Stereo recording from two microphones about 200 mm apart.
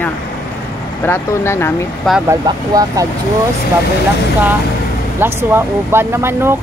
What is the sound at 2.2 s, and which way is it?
Speech, 15° right (ahead or behind).